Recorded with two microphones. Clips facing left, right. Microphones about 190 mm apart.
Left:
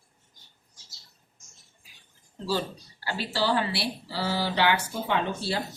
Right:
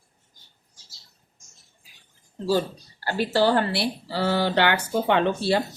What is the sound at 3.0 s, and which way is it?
Speech, 50° right (ahead or behind).